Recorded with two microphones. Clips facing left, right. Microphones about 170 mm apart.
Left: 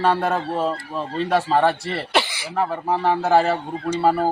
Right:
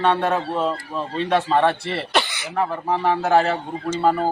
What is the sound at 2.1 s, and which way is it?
Throat clearing, 30° left (ahead or behind).